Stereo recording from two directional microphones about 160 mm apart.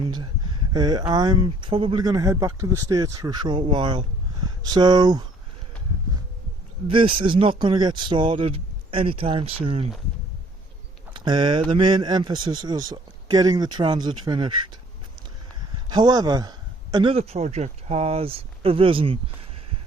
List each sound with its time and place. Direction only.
0.0 s speech: 30° right (ahead or behind)
6.8 s speech: 35° right (ahead or behind)
11.1 s speech: 30° right (ahead or behind)
15.9 s speech: 25° right (ahead or behind)